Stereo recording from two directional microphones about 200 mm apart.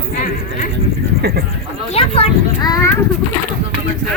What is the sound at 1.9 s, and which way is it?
Speech, 30° left (ahead or behind).